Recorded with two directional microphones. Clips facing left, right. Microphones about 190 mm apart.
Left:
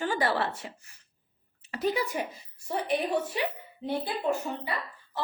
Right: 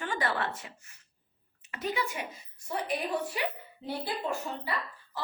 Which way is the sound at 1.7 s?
35° left (ahead or behind).